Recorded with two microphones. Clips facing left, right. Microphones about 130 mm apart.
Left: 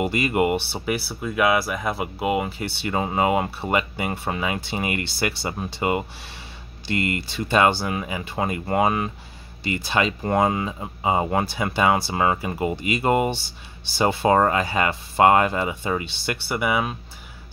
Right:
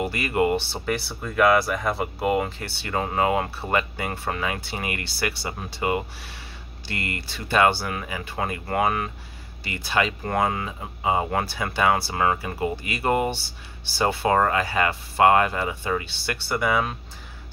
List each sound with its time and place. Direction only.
0.0 s speech: 20° left (ahead or behind)